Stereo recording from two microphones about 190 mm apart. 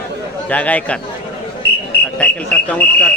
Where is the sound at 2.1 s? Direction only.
5° left (ahead or behind).